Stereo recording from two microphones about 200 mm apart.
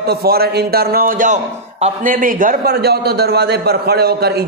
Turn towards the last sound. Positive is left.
turn(degrees=-55)  # may be behind; listen again after turning